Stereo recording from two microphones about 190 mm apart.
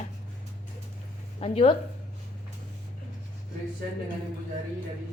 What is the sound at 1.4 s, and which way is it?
Speech, 30° left (ahead or behind).